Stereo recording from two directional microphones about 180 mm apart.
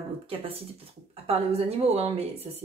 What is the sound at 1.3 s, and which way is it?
Speech, 35° right (ahead or behind).